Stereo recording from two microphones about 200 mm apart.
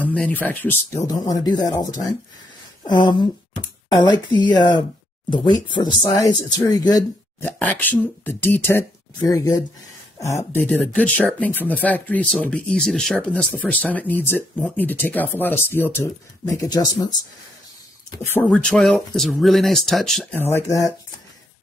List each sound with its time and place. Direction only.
0.0 s speech: 5° left (ahead or behind)
10.1 s speech: 15° left (ahead or behind)
18.1 s speech: 10° left (ahead or behind)